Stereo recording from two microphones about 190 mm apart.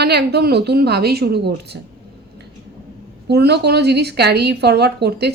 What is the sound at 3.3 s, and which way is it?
Speech, 60° right (ahead or behind).